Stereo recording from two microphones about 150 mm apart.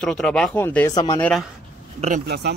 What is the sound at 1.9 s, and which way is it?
Speech, 50° right (ahead or behind).